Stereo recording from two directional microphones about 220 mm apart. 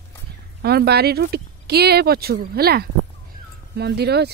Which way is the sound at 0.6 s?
45° right (ahead or behind).